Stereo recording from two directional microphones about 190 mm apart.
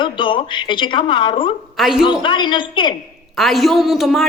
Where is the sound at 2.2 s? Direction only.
25° left (ahead or behind).